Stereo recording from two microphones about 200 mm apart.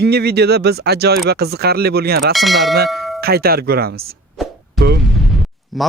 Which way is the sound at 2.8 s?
Centre (ahead or behind).